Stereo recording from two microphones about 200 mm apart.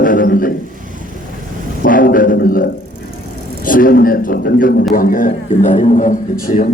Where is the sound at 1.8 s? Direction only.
45° left (ahead or behind).